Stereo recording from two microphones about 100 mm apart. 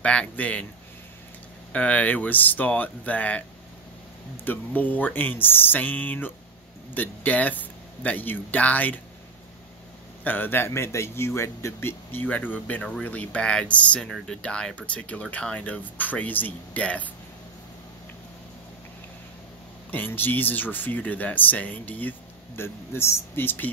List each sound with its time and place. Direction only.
0.0 s speech: 10° left (ahead or behind)
1.7 s speech: 15° left (ahead or behind)
4.5 s speech: 15° left (ahead or behind)
10.2 s speech: 20° left (ahead or behind)
19.9 s speech: 20° left (ahead or behind)